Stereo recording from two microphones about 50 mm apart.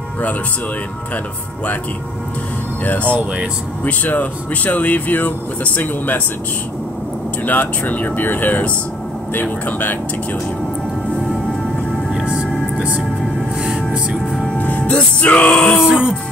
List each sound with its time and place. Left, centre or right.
2.8 s speech: left
7.4 s speech: left
12.7 s music: right
14.6 s music: left
15.8 s music: centre